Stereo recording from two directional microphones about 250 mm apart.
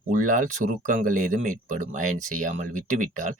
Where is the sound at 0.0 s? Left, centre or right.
Right.